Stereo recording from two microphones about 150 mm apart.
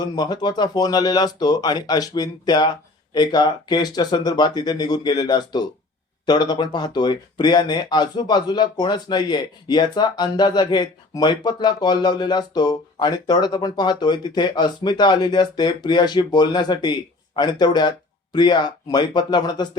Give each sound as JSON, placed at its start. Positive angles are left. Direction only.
{"t": 0.0, "sound": "speech", "side_deg": 25}